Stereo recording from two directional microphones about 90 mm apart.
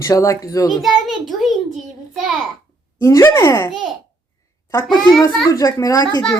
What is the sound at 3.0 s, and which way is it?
Speech, 35° left (ahead or behind).